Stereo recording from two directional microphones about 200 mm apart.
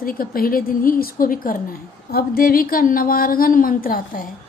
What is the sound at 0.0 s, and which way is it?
A woman's voice, 45° left (ahead or behind).